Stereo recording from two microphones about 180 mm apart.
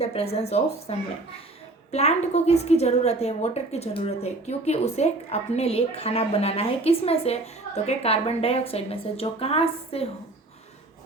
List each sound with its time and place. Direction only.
0.0 s a woman's voice: 35° left (ahead or behind)